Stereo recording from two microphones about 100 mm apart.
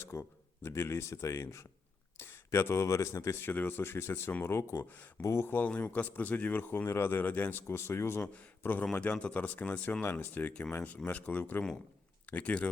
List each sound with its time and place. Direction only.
0.0 s a man's voice: 25° left (ahead or behind)